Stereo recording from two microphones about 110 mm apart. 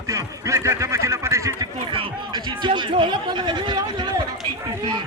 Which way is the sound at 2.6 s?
45° right (ahead or behind).